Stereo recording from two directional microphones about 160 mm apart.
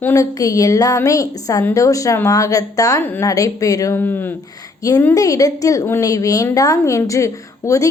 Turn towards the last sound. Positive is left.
turn(degrees=20)  # may be behind; listen again after turning